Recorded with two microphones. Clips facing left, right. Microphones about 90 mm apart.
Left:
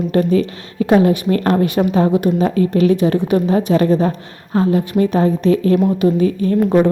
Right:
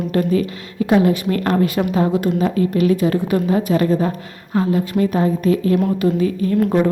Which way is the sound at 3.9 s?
20° left (ahead or behind).